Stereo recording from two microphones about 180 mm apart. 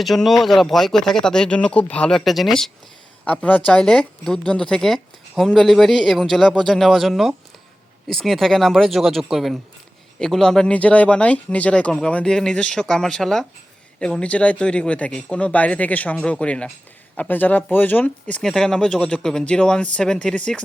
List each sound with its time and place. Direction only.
0.0 s speech: centre (ahead or behind)